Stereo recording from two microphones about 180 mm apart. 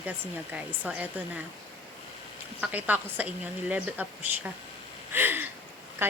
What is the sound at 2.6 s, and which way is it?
Speech, 10° right (ahead or behind).